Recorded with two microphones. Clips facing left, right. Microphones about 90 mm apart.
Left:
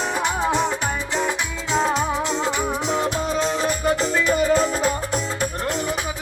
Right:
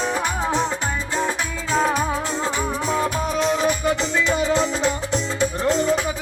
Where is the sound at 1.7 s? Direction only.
20° left (ahead or behind).